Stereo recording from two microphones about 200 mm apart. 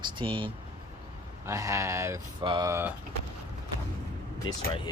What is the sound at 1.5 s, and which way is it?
Speech, 15° right (ahead or behind).